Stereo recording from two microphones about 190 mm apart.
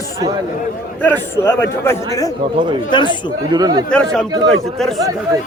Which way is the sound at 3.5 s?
20° right (ahead or behind).